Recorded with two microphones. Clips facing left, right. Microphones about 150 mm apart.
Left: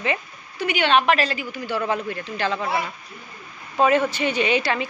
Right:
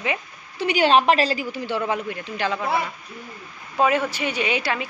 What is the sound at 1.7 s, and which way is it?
Speech, 15° right (ahead or behind).